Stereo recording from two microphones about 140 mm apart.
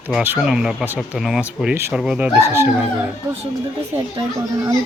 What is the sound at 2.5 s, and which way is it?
Speech, 20° right (ahead or behind).